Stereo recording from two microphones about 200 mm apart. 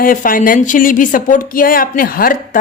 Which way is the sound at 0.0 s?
45° left (ahead or behind).